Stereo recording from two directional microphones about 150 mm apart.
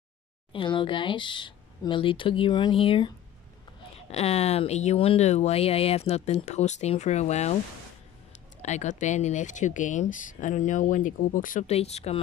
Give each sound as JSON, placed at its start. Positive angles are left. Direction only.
{"t": 0.5, "sound": "speech", "side_deg": 35}
{"t": 4.1, "sound": "speech", "side_deg": 45}
{"t": 8.6, "sound": "speech", "side_deg": 50}
{"t": 11.6, "sound": "speech", "side_deg": 45}